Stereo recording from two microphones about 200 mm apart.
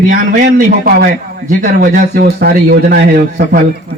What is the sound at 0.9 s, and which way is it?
A man's voice, 45° right (ahead or behind).